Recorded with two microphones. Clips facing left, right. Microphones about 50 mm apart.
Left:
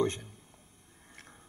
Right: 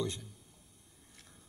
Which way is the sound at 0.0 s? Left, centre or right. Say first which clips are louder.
Left 7 dB; left.